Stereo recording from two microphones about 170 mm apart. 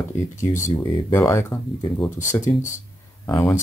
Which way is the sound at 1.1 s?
15° left (ahead or behind).